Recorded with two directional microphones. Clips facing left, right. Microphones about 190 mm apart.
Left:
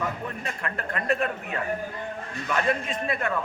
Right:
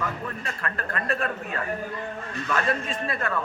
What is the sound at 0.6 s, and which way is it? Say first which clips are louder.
A man's voice: left 2 dB; 20° left (ahead or behind).